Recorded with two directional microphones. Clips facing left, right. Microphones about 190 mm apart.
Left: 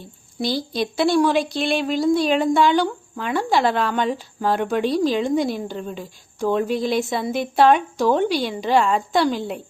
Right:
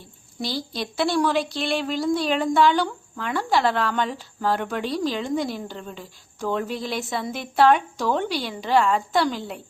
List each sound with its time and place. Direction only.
0.3 s speech: 15° left (ahead or behind)